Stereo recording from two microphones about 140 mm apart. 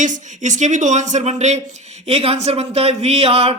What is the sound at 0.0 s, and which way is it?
Speech, 65° right (ahead or behind).